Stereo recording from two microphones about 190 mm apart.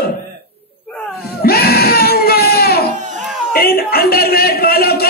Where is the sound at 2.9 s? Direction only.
40° right (ahead or behind).